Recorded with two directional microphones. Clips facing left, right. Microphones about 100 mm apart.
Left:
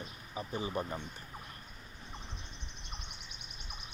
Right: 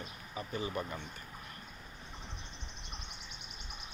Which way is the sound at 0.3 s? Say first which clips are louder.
Left 1 dB; 25° left (ahead or behind).